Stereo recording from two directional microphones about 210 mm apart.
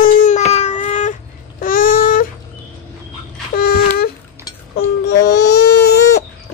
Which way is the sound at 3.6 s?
45° left (ahead or behind).